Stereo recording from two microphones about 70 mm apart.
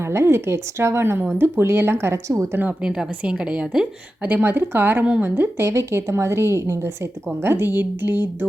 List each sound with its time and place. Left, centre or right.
0.0 s a woman's voice: right
2.8 s a woman's voice: centre
4.2 s a woman's voice: right
7.4 s speech: right